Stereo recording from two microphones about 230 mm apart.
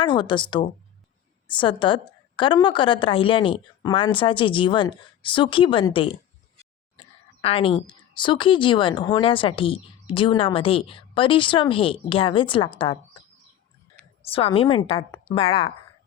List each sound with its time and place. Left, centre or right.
0.0 s a woman's voice: left
7.4 s a woman's voice: left
14.3 s a woman's voice: left